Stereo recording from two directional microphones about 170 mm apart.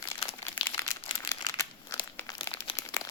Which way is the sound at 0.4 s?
15° left (ahead or behind).